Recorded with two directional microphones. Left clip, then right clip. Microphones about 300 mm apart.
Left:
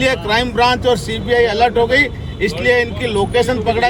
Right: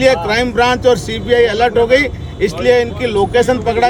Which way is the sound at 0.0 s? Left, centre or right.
Centre.